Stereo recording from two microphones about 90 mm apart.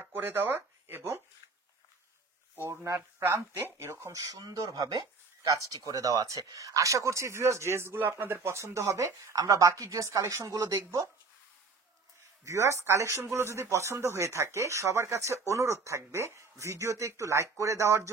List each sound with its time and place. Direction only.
0.0 s speech: 25° right (ahead or behind)
2.5 s speech: 30° right (ahead or behind)
12.4 s speech: 35° right (ahead or behind)